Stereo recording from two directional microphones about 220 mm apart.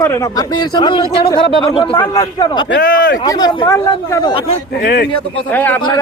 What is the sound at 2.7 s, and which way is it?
Speech, 40° left (ahead or behind).